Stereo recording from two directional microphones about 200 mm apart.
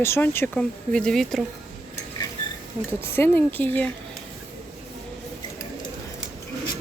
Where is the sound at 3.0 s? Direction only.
10° left (ahead or behind).